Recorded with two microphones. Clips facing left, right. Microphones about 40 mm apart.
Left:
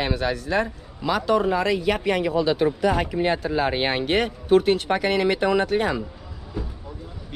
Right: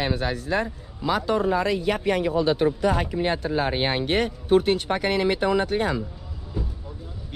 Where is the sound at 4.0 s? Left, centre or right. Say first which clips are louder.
Left 1 dB; left.